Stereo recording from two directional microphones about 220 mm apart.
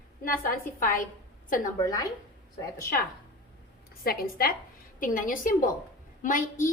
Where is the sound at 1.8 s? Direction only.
15° left (ahead or behind).